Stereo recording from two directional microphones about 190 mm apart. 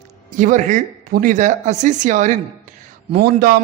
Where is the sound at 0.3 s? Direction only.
45° right (ahead or behind).